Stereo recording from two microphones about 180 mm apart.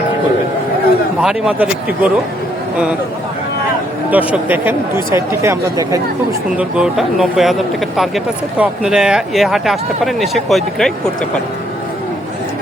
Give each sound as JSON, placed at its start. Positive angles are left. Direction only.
{"t": 1.2, "sound": "speech", "side_deg": -5}
{"t": 4.1, "sound": "speech", "side_deg": -10}
{"t": 6.6, "sound": "speech", "side_deg": -5}